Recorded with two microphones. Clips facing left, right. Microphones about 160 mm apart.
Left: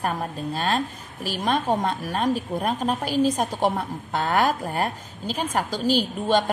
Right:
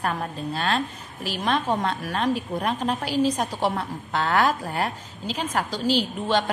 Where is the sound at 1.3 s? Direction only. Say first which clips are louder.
Left 1 dB; 45° left (ahead or behind).